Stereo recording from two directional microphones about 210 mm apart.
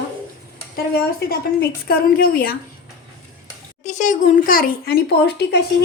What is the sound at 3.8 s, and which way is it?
Speech, 35° left (ahead or behind).